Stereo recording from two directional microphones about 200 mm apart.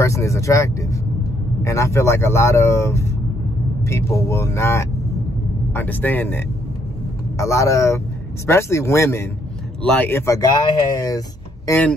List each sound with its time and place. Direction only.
0.0 s speech: 15° left (ahead or behind)